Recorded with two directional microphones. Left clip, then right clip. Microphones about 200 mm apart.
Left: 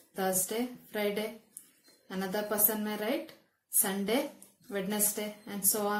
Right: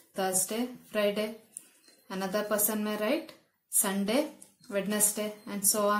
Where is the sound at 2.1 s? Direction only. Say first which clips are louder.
Right 3 dB; 40° right (ahead or behind).